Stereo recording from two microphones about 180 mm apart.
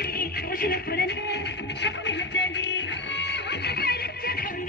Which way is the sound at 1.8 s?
80° left.